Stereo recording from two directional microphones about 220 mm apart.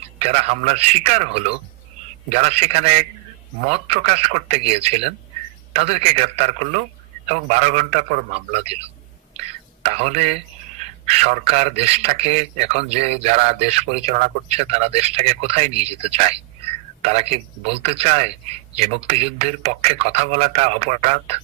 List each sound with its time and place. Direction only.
0.2 s a man's voice: 30° right (ahead or behind)
9.3 s whispering: 30° right (ahead or behind)
10.8 s a man's voice: 30° right (ahead or behind)